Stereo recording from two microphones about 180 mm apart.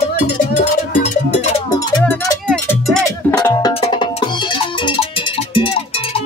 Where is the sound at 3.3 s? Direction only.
20° left (ahead or behind).